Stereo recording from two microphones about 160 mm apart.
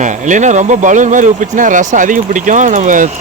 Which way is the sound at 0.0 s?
50° right (ahead or behind).